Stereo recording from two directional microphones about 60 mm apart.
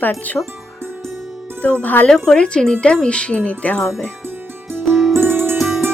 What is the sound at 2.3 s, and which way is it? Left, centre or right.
Speech, centre.